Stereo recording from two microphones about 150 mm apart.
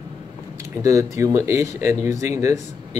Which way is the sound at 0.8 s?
20° right (ahead or behind).